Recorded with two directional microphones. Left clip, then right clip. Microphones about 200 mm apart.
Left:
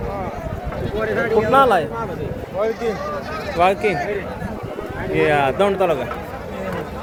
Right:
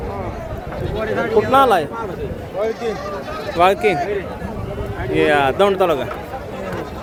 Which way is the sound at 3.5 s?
15° right (ahead or behind).